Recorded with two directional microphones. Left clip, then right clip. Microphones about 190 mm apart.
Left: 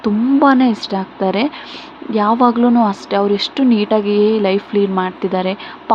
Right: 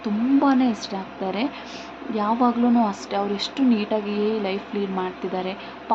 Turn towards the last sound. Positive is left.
turn(degrees=30)  # may be behind; listen again after turning